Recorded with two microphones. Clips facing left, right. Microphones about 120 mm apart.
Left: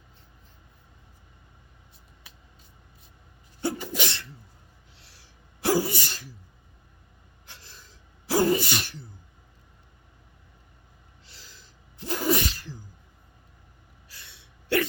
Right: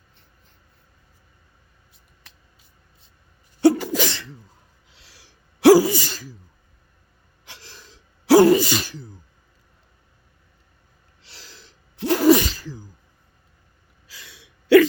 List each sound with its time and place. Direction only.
3.6 s sneeze: 90° right
7.4 s sneeze: 90° right
11.2 s sneeze: 80° right
14.1 s gasp: 90° right